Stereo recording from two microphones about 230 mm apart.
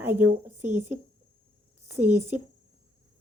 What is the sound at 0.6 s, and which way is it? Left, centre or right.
Speech, right.